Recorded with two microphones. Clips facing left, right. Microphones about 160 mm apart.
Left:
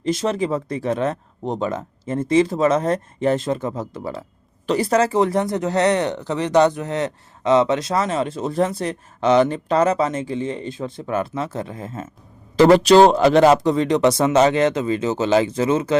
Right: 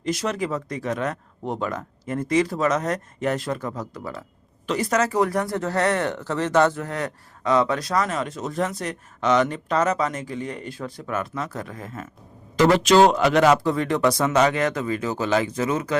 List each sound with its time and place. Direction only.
0.0 s speech: 25° left (ahead or behind)